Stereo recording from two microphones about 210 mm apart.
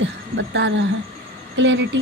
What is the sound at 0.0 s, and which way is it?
A woman's voice, 60° right (ahead or behind).